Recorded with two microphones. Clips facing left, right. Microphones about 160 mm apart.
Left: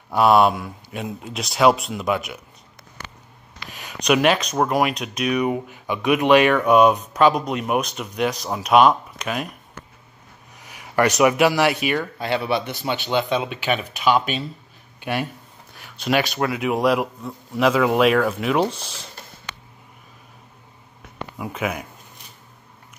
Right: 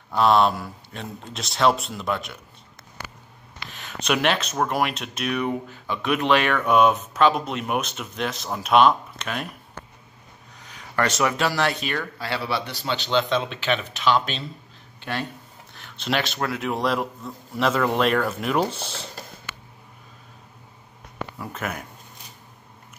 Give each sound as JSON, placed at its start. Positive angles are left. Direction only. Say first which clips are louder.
{"t": 0.1, "sound": "speech", "louder": "left 3 dB", "side_deg": 10}
{"t": 3.7, "sound": "speech", "louder": "left 5 dB", "side_deg": 5}
{"t": 10.6, "sound": "a sound", "louder": "left 5 dB", "side_deg": 15}
{"t": 11.1, "sound": "speech", "louder": "left 8 dB", "side_deg": 15}
{"t": 15.7, "sound": "speech", "louder": "left 5 dB", "side_deg": 5}
{"t": 21.4, "sound": "speech", "louder": "left 6 dB", "side_deg": 5}